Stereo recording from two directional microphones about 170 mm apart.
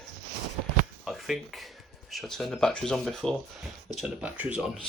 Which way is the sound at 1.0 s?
Centre (ahead or behind).